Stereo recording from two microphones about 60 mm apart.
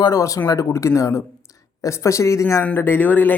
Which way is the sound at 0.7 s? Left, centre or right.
Left.